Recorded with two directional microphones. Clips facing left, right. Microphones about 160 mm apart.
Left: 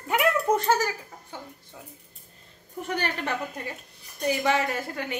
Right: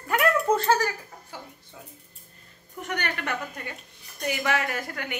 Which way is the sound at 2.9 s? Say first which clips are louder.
Left 2 dB; 30° left (ahead or behind).